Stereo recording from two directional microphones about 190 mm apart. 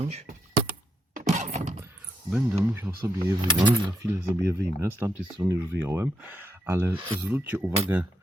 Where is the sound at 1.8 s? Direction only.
5° right (ahead or behind).